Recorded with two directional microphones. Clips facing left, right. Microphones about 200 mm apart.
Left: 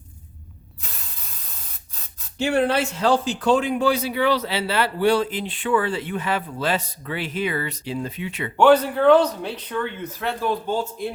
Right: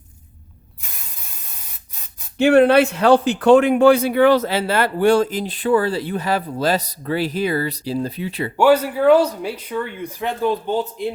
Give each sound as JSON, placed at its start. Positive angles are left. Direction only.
{"t": 2.4, "sound": "speech", "side_deg": -60}
{"t": 8.5, "sound": "speech", "side_deg": -10}